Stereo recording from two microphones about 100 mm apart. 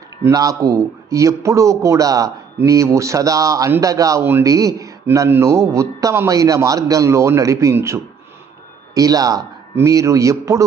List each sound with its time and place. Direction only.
0.3 s a man's voice: 35° right (ahead or behind)
9.0 s a man's voice: 40° right (ahead or behind)